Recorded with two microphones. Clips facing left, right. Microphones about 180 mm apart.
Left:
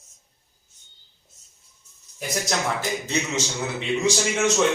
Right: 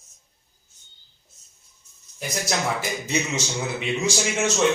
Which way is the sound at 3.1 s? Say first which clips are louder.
Even; 10° right (ahead or behind).